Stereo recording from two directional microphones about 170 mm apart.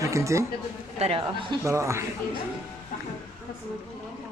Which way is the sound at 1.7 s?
15° right (ahead or behind).